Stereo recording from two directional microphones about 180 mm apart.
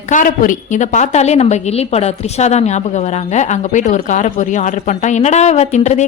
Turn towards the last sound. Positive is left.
turn(degrees=40)  # may be behind; listen again after turning